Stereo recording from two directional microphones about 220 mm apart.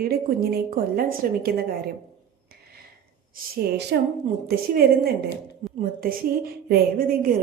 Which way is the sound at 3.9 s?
50° right (ahead or behind).